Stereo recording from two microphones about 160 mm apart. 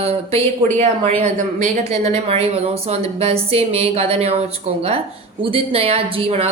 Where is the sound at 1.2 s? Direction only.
55° right (ahead or behind).